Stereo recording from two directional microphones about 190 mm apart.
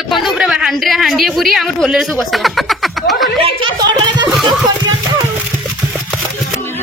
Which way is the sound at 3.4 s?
30° right (ahead or behind).